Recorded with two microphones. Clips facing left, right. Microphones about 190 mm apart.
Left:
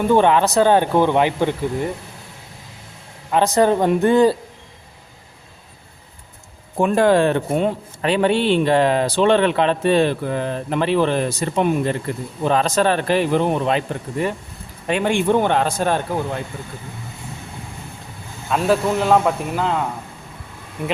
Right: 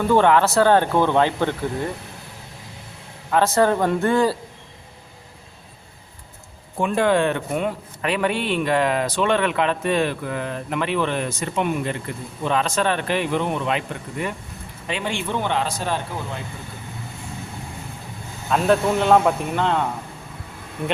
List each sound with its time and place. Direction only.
0.1 s speech: 15° left (ahead or behind)
3.3 s speech: 15° left (ahead or behind)
6.7 s a man's voice: 40° left (ahead or behind)
14.8 s speech: 50° left (ahead or behind)
18.4 s speech: centre (ahead or behind)